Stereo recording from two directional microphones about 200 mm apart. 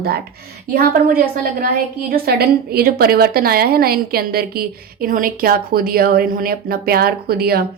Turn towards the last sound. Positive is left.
turn(degrees=-50)  # may be behind; listen again after turning